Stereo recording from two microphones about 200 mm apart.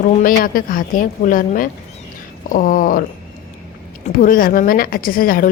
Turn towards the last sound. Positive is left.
turn(degrees=45)  # may be behind; listen again after turning